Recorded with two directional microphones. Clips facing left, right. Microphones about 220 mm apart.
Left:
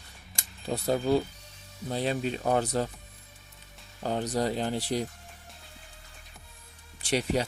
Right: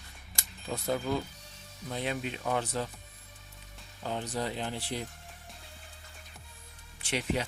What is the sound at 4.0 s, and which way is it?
Speech, 40° left (ahead or behind).